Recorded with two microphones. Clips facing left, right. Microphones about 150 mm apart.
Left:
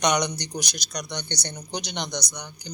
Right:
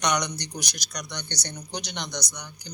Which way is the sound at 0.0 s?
20° left (ahead or behind).